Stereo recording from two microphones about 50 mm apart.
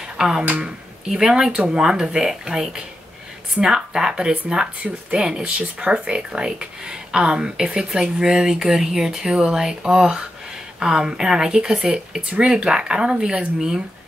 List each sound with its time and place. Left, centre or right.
0.2 s speech: centre